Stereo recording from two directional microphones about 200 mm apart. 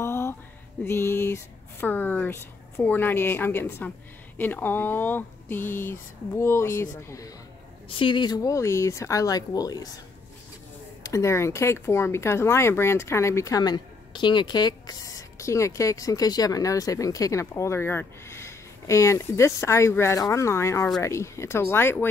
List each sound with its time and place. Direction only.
0.0 s music: 10° left (ahead or behind)
0.8 s speech: 10° left (ahead or behind)
11.0 s speech: 15° left (ahead or behind)